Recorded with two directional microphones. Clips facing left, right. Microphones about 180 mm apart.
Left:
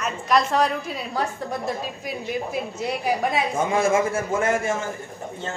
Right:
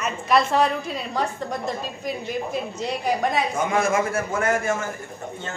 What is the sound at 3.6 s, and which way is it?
A man's voice, 30° left (ahead or behind).